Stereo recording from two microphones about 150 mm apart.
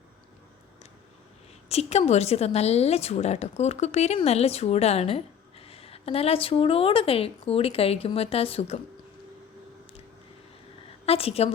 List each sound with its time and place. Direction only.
1.7 s a woman's voice: 45° left (ahead or behind)
11.0 s a woman's voice: 40° left (ahead or behind)